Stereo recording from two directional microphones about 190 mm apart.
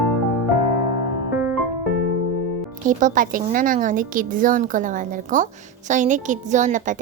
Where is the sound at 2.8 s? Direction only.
45° right (ahead or behind).